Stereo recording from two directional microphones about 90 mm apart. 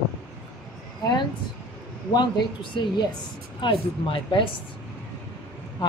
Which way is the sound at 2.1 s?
65° left (ahead or behind).